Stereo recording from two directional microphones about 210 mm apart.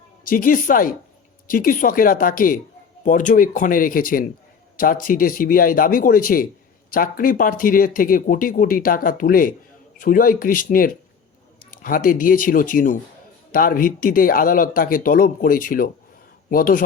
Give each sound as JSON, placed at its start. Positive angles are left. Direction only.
{"t": 0.3, "sound": "speech", "side_deg": 40}